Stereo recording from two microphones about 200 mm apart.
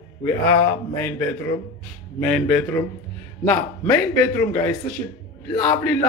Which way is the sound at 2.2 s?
5° left (ahead or behind).